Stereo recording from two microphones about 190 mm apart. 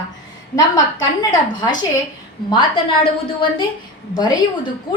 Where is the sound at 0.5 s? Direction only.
20° left (ahead or behind).